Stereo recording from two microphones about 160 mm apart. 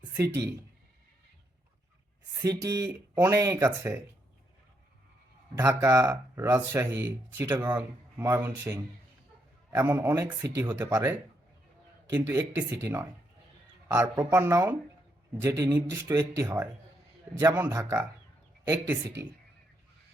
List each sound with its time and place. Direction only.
2.3 s speech: 20° right (ahead or behind)
5.5 s speech: 15° right (ahead or behind)
9.7 s speech: 15° right (ahead or behind)